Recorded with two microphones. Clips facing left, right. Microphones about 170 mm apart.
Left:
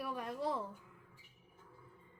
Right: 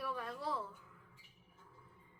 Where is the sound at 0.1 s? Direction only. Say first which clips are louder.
Left 3 dB; 20° left (ahead or behind).